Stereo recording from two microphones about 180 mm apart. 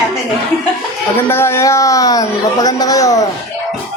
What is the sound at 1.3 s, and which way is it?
A man's voice, 15° left (ahead or behind).